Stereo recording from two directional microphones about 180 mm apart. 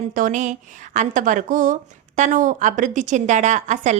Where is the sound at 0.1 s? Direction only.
45° right (ahead or behind).